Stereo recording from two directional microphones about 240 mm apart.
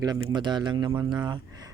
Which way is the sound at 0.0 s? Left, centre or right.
Centre.